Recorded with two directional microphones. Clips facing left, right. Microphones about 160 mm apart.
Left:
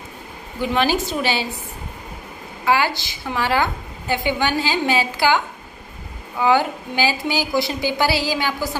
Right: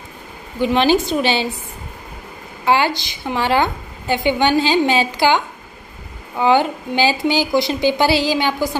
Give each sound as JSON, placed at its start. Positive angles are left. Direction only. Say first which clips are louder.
{"t": 0.6, "sound": "a woman's voice", "louder": "right 5 dB", "side_deg": -25}
{"t": 2.6, "sound": "a woman's voice", "louder": "right 3 dB", "side_deg": -25}
{"t": 6.4, "sound": "a woman's voice", "louder": "right 3 dB", "side_deg": -25}